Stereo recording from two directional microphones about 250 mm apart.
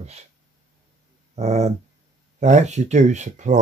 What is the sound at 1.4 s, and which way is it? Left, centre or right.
Speech, right.